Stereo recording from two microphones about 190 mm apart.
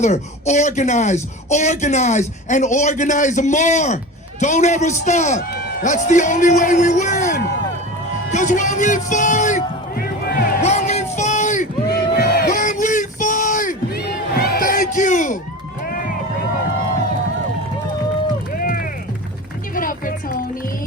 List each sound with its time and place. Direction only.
0.0 s a man's voice: 40° left (ahead or behind)
8.3 s speech: 40° left (ahead or behind)
10.6 s a sound: 35° left (ahead or behind)
12.1 s a sound: 55° left (ahead or behind)
15.9 s vehicle: 45° left (ahead or behind)
18.5 s music: 50° left (ahead or behind)